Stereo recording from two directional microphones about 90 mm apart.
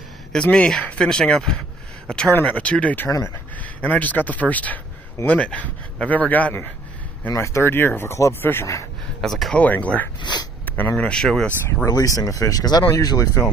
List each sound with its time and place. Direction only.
0.3 s speech: 10° left (ahead or behind)
3.1 s speech: 35° left (ahead or behind)
3.8 s speech: 20° left (ahead or behind)
7.3 s speech: 30° left (ahead or behind)
9.2 s speech: 5° left (ahead or behind)
9.6 s speech: 15° left (ahead or behind)
11.9 s speech: 40° left (ahead or behind)